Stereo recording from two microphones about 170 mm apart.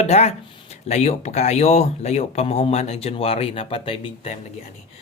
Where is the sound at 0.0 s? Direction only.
40° left (ahead or behind).